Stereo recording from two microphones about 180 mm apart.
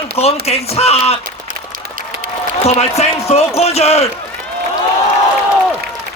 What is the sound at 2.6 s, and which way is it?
Speech, 35° left (ahead or behind).